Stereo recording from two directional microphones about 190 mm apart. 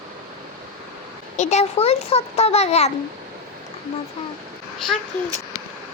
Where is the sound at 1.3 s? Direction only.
35° left (ahead or behind).